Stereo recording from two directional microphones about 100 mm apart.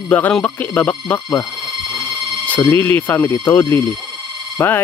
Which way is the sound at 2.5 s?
20° left (ahead or behind).